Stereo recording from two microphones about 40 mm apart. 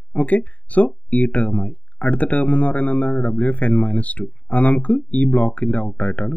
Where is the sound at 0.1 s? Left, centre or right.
Left.